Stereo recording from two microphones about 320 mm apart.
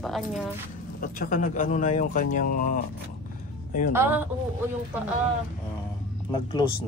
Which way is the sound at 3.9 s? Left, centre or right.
Centre.